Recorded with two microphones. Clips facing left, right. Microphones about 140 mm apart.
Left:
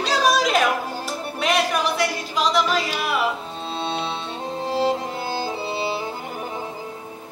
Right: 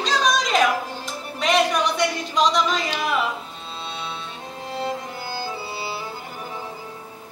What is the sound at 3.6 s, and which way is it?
Music, 30° left (ahead or behind).